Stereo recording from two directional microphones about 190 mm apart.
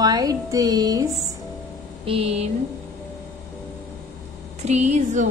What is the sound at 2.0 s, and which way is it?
Speech, 30° right (ahead or behind).